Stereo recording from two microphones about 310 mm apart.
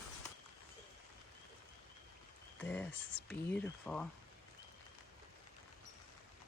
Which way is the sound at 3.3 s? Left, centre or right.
Centre.